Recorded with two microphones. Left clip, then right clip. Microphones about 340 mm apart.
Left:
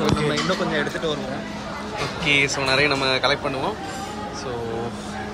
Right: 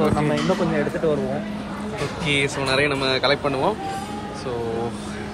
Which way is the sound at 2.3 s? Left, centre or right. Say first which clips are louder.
Left 3 dB; centre.